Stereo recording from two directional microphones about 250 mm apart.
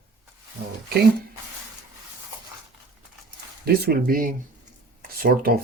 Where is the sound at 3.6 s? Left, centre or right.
Right.